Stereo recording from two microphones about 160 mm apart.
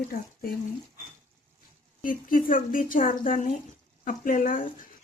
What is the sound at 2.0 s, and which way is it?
Speech, 60° left (ahead or behind).